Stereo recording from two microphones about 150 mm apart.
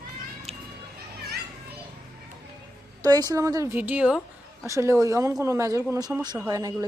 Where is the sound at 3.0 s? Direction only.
25° right (ahead or behind); by 4.2 s 10° right (ahead or behind).